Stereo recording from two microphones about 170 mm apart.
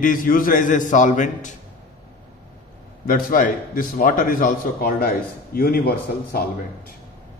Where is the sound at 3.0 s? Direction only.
55° left (ahead or behind).